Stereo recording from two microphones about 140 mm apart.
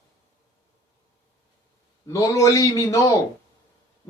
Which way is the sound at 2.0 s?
25° left (ahead or behind).